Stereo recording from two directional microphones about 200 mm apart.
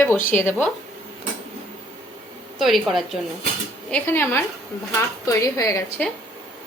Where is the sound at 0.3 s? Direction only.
10° left (ahead or behind).